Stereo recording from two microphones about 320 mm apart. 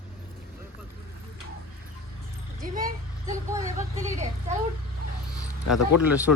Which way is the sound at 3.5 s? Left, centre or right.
Centre.